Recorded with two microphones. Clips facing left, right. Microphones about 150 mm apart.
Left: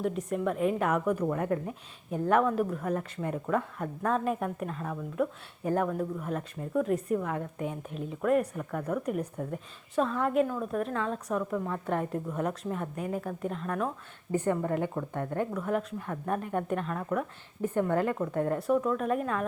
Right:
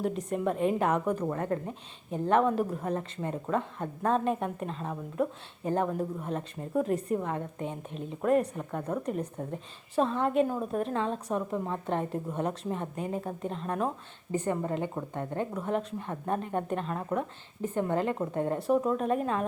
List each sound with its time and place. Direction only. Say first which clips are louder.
0.0 s a woman's voice: even; 5° left (ahead or behind)
0.4 s a woman's voice: right 1 dB; 30° right (ahead or behind)
1.4 s speech: left 1 dB; 10° left (ahead or behind)
2.1 s a woman's voice: even; 20° right (ahead or behind)
6.8 s a woman's voice: left 1 dB; centre (ahead or behind)
7.2 s a woman's voice: even; 25° right (ahead or behind)
14.3 s a woman's voice: left 2 dB; 15° right (ahead or behind)
15.5 s a woman's voice: even; 25° right (ahead or behind)